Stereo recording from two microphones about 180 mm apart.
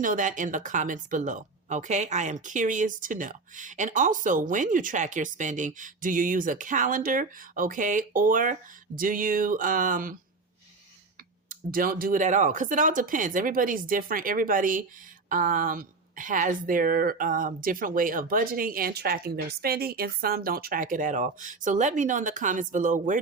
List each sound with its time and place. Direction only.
0.0 s speech: 45° right (ahead or behind)
11.4 s speech: 50° right (ahead or behind)